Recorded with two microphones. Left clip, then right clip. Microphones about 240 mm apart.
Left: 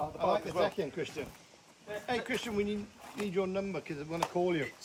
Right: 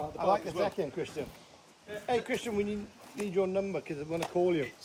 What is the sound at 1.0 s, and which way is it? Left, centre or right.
Speech, centre.